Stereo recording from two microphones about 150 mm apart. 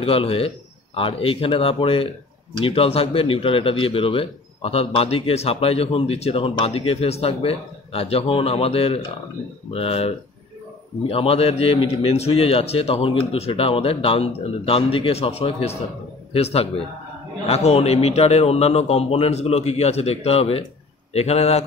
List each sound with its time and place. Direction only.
0.0 s a man's voice: 40° left (ahead or behind)